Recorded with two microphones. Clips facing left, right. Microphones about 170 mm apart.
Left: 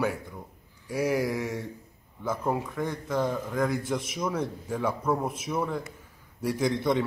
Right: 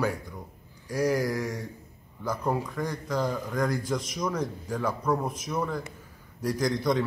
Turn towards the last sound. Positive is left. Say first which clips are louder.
# left 1 dB
turn(degrees=5)  # may be behind; listen again after turning